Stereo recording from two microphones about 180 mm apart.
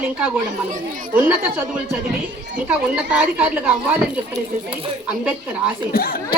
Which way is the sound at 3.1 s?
10° right (ahead or behind).